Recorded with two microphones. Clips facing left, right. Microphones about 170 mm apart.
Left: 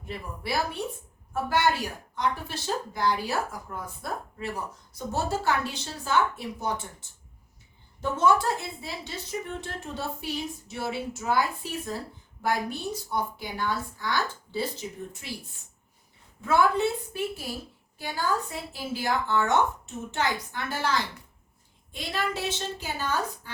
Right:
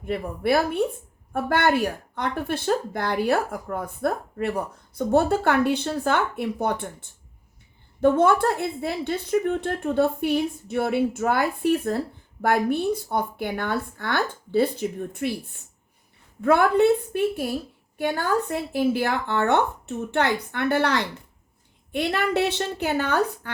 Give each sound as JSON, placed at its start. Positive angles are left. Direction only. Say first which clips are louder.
{"t": 0.0, "sound": "speech", "louder": "right 11 dB", "side_deg": -55}
{"t": 8.0, "sound": "speech", "louder": "right 6 dB", "side_deg": -55}
{"t": 16.4, "sound": "speech", "louder": "right 5 dB", "side_deg": -60}